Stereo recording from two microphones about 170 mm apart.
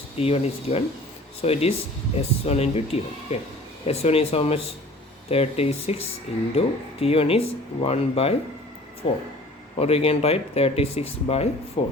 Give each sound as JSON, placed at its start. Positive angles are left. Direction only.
{"t": 0.2, "sound": "speech", "side_deg": 35}